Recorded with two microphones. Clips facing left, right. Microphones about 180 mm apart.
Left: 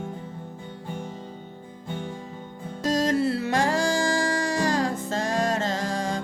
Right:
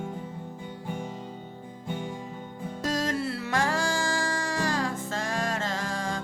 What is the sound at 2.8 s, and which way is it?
Music, 40° left (ahead or behind).